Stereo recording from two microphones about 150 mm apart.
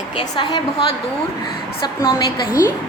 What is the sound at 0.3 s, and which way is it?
Speech, 30° left (ahead or behind).